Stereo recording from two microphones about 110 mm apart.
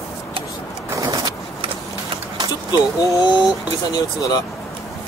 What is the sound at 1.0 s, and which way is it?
Vehicle, 45° right (ahead or behind).